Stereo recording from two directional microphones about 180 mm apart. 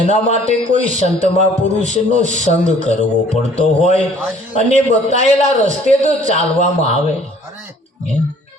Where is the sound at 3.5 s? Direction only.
45° right (ahead or behind).